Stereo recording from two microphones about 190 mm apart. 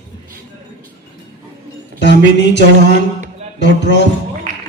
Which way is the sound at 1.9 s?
65° left (ahead or behind).